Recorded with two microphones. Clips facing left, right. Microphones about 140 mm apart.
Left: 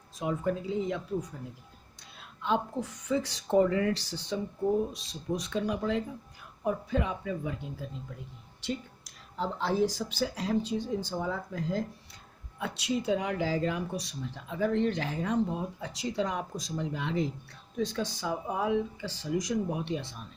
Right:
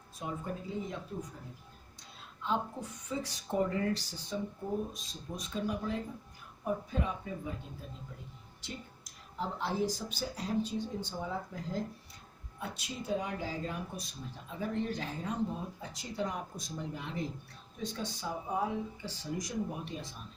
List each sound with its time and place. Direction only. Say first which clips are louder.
0.2 s a woman's voice: left 8 dB; 90° left
2.4 s a woman's voice: left 5 dB; 85° left
8.6 s a woman's voice: left 10 dB; 85° left